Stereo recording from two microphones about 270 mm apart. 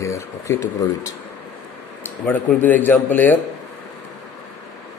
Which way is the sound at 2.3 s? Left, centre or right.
Centre.